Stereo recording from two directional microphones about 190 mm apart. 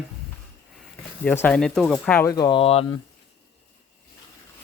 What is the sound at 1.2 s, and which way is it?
Speech, 5° left (ahead or behind).